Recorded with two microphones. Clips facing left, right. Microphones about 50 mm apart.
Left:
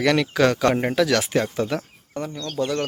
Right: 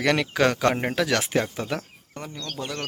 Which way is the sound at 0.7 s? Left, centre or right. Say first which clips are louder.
Left 4 dB; centre.